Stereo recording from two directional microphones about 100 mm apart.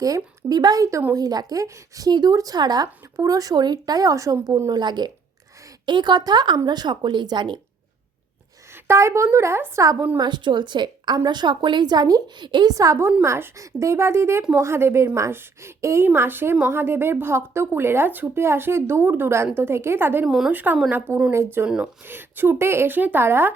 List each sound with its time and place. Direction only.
0.0 s speech: 40° right (ahead or behind)
8.7 s a woman's voice: 25° right (ahead or behind)
10.2 s speech: 50° right (ahead or behind)
12.5 s speech: 50° right (ahead or behind)
12.7 s a woman's voice: 35° right (ahead or behind)
20.2 s speech: 5° right (ahead or behind)
20.5 s a woman's voice: 15° right (ahead or behind)